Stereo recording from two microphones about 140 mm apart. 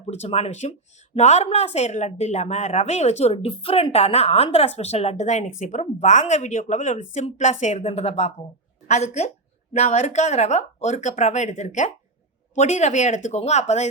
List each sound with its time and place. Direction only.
0.1 s speech: 50° left (ahead or behind)